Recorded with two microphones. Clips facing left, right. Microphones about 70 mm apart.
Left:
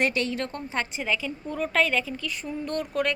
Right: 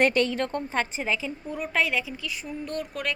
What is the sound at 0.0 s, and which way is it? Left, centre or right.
A woman's voice, right.